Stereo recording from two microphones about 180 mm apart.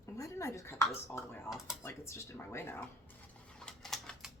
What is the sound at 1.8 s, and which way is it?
Speech, 15° left (ahead or behind).